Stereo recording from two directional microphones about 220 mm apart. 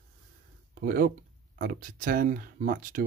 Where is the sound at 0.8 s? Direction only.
40° right (ahead or behind).